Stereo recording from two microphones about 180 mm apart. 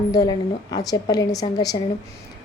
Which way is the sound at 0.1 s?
20° left (ahead or behind).